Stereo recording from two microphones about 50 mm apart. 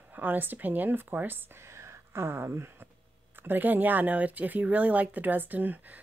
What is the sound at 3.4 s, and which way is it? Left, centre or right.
Speech, right.